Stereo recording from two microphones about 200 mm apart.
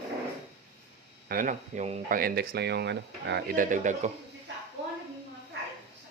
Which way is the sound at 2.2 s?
50° right (ahead or behind).